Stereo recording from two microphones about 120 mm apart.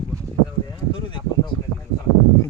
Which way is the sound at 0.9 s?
40° left (ahead or behind).